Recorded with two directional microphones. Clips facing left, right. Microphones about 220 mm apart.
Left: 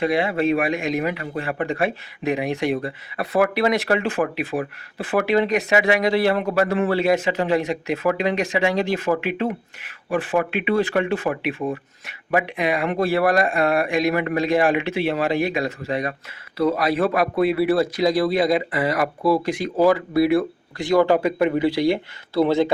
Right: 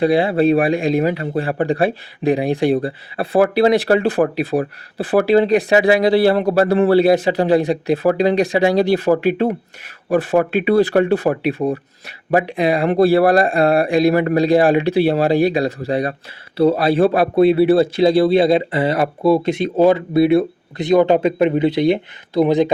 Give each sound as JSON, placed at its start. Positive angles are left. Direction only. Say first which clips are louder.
{"t": 0.0, "sound": "speech", "louder": "right 6 dB", "side_deg": -30}